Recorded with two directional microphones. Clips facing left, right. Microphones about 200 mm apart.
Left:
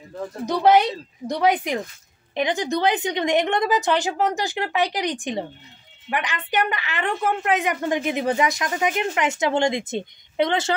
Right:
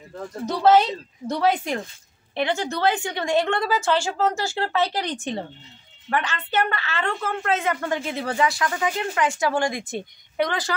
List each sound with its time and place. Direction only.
0.5 s a woman's voice: 15° left (ahead or behind)